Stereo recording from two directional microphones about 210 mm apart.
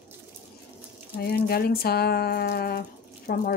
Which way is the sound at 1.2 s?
45° left (ahead or behind).